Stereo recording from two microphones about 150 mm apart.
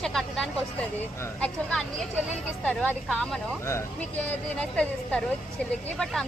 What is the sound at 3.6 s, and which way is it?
Speech, 20° left (ahead or behind).